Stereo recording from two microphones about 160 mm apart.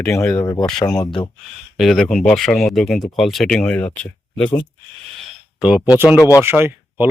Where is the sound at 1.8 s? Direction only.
Centre (ahead or behind).